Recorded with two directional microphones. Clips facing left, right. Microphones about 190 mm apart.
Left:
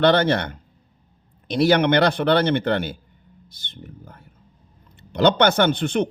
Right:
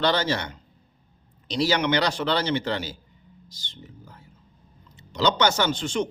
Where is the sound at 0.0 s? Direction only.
55° left (ahead or behind).